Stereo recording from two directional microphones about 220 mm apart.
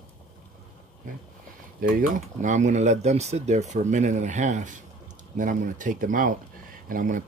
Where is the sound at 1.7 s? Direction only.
35° right (ahead or behind).